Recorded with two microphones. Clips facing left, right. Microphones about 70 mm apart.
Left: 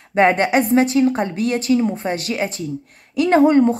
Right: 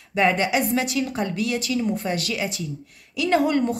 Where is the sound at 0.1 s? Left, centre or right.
Left.